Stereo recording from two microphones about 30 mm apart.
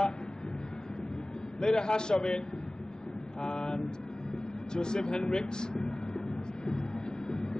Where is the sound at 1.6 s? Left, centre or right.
Left.